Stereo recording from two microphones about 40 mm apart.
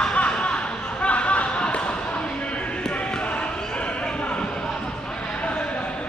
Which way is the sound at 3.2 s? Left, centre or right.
Left.